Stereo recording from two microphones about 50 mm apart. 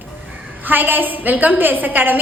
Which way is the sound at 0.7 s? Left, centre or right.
Right.